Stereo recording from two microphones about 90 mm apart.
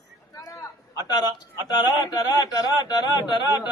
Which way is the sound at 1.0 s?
50° left (ahead or behind).